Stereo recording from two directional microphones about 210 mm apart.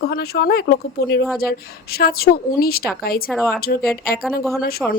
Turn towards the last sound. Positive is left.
turn(degrees=-5)  # may be behind; listen again after turning